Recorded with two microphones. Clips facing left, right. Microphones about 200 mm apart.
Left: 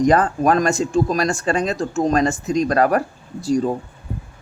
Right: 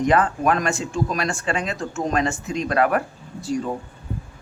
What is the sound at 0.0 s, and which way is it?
Speech, 40° left (ahead or behind).